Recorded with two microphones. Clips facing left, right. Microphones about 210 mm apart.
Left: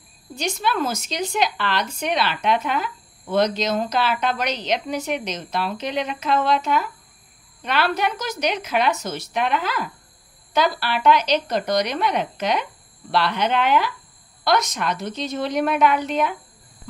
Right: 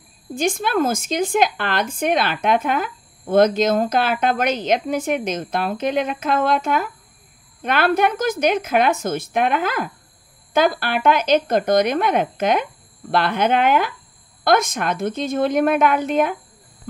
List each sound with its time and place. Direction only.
0.3 s a woman's voice: 50° right (ahead or behind)